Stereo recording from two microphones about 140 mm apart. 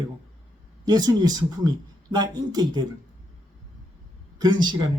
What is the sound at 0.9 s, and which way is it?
Speech, 30° right (ahead or behind).